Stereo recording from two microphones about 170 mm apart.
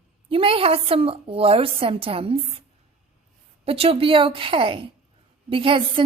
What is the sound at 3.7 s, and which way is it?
A woman's voice, 35° right (ahead or behind).